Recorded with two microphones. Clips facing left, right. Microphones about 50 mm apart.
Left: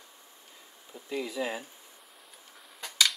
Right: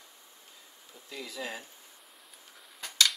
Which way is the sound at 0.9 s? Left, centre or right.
Left.